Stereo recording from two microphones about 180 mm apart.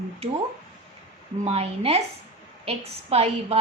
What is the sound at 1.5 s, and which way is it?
A woman's voice, 35° right (ahead or behind).